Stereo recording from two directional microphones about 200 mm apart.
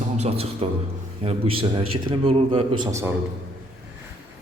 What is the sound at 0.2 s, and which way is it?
Speech, 30° right (ahead or behind).